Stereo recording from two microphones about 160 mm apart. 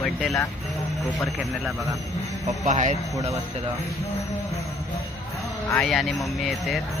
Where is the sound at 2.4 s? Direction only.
50° right (ahead or behind).